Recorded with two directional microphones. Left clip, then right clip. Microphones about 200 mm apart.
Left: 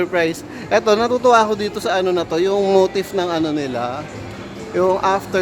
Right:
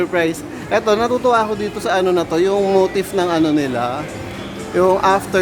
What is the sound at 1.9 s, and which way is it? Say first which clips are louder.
Speech: right 2 dB; 5° left (ahead or behind).